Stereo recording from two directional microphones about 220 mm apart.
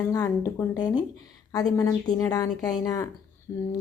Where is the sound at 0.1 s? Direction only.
15° left (ahead or behind).